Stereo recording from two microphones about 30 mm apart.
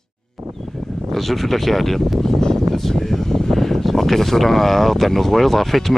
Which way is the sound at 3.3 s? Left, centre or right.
Centre.